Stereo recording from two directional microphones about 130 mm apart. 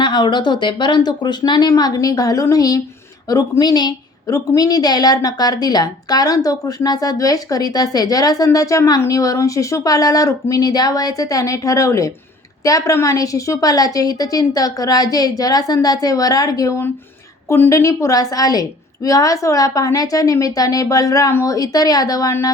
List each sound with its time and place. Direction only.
0.0 s a woman's voice: 35° left (ahead or behind)